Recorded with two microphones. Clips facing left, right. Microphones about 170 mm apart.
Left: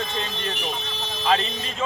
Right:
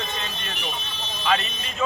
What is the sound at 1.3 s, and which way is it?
Speech, 30° left (ahead or behind).